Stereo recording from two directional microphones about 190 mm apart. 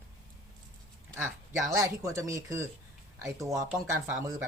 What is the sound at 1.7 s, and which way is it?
Speech, 15° right (ahead or behind).